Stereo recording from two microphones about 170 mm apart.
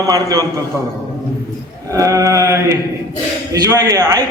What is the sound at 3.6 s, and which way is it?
Speech, 20° right (ahead or behind).